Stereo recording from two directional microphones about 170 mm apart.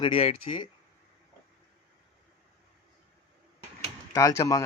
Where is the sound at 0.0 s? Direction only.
35° left (ahead or behind).